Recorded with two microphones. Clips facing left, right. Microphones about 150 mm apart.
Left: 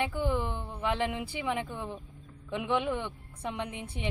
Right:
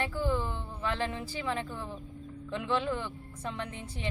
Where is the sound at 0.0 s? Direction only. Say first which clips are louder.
Left 1 dB; 15° left (ahead or behind).